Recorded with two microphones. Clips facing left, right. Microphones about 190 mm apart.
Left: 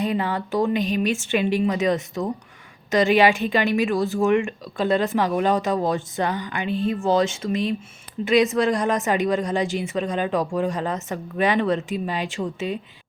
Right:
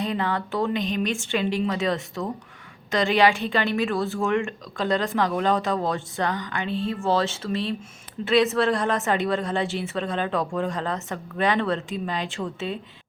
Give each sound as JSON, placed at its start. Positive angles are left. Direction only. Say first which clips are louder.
{"t": 0.0, "sound": "a woman's voice", "louder": "left 2 dB", "side_deg": 15}